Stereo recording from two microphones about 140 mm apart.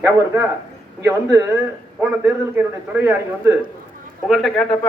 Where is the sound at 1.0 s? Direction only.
15° right (ahead or behind).